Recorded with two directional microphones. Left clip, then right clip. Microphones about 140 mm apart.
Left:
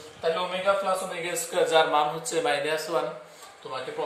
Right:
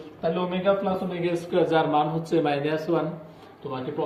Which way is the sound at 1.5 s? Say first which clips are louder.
Left 1 dB; 45° left (ahead or behind).